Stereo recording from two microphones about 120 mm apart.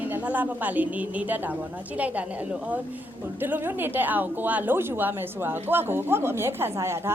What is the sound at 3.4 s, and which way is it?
A woman's voice, 15° right (ahead or behind).